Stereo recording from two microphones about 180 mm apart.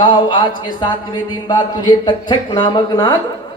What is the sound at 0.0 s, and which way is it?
A man's voice, 25° left (ahead or behind).